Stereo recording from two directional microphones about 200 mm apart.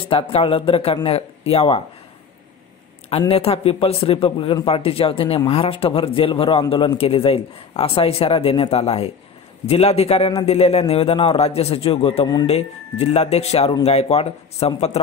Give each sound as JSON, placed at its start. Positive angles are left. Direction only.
{"t": 0.1, "sound": "a man's voice", "side_deg": 30}
{"t": 3.1, "sound": "a man's voice", "side_deg": 30}